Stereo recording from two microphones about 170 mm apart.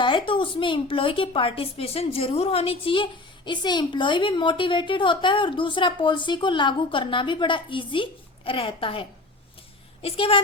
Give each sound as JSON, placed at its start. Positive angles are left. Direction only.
{"t": 0.0, "sound": "a woman's voice", "side_deg": 30}